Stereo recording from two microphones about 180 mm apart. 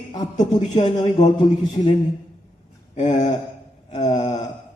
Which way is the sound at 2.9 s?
40° left (ahead or behind).